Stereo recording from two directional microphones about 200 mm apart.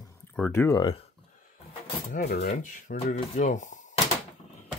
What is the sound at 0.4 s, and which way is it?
Speech, 10° left (ahead or behind).